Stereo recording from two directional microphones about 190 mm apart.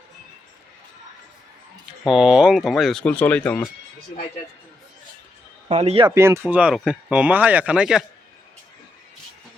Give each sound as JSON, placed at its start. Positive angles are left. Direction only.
{"t": 2.0, "sound": "speech", "side_deg": -5}
{"t": 5.6, "sound": "speech", "side_deg": -30}
{"t": 6.1, "sound": "speech", "side_deg": -15}